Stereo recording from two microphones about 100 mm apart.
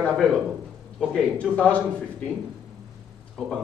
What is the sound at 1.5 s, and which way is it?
Speech, 10° left (ahead or behind).